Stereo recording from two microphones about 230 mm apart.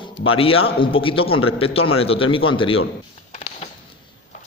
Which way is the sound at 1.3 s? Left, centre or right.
Left.